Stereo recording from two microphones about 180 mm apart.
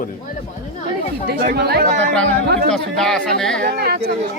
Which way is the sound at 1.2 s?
60° right (ahead or behind).